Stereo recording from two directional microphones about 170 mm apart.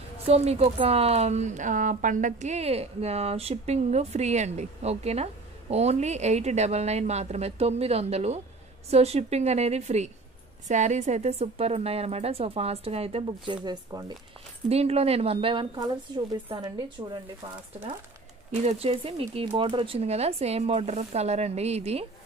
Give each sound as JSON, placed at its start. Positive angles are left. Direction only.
{"t": 0.3, "sound": "speech", "side_deg": -35}
{"t": 13.7, "sound": "speech", "side_deg": -25}
{"t": 14.7, "sound": "speech", "side_deg": -35}
{"t": 18.7, "sound": "speech", "side_deg": -35}